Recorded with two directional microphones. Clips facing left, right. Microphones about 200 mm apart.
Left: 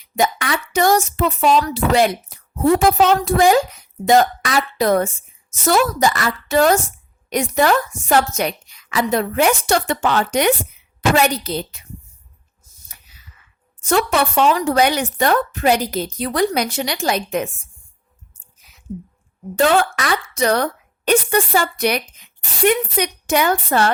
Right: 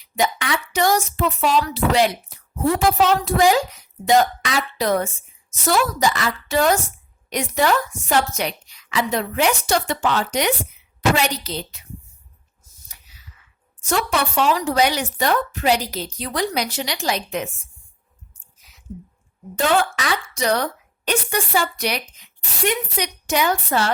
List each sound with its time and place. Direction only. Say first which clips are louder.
0.2 s a woman's voice: left 2 dB; 50° left (ahead or behind)
13.8 s a woman's voice: left 4 dB; 55° left (ahead or behind)
18.9 s a woman's voice: left 6 dB; 50° left (ahead or behind)